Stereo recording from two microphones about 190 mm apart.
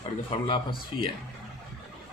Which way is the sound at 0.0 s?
25° left (ahead or behind).